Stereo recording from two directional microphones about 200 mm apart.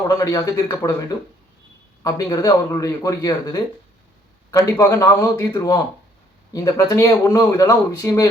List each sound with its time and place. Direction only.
0.1 s speech: 15° left (ahead or behind)
2.0 s speech: 20° left (ahead or behind)